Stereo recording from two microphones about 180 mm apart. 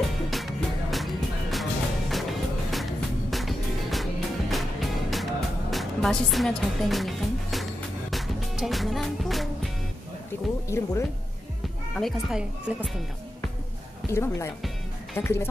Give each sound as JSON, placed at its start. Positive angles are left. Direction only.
{"t": 0.3, "sound": "music", "side_deg": 0}
{"t": 10.7, "sound": "speech", "side_deg": 15}
{"t": 12.0, "sound": "speech", "side_deg": -5}
{"t": 14.1, "sound": "speech", "side_deg": 15}